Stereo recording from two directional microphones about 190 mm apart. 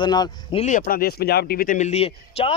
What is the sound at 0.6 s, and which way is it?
A man's voice, 45° left (ahead or behind).